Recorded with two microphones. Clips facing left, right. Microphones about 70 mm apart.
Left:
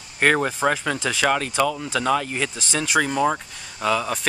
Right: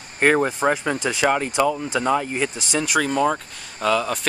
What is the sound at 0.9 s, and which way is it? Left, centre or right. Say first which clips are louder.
Speech: right 1 dB; centre.